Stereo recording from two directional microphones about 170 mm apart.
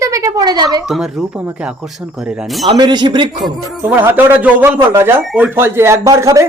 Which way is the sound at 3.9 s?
10° right (ahead or behind).